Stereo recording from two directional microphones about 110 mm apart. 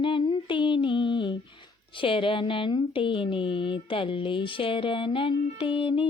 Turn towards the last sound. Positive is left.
turn(degrees=50)  # may be behind; listen again after turning